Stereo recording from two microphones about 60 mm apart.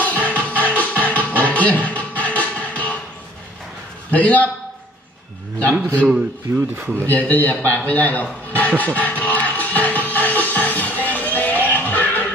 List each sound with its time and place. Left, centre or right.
0.0 s music: left
4.1 s a man's voice: left
6.5 s speech: right
7.1 s a sound: left